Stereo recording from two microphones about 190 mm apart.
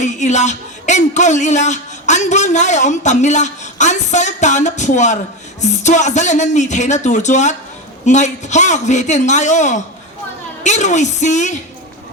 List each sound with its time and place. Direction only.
0.0 s speech: 40° left (ahead or behind)